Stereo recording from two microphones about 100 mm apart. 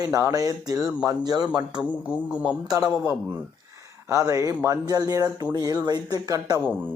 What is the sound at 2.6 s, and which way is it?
Speech, 40° right (ahead or behind).